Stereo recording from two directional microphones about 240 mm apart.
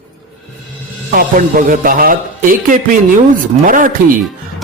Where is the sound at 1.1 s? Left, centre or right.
Right.